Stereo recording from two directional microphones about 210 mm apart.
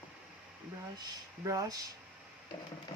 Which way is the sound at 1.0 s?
15° right (ahead or behind).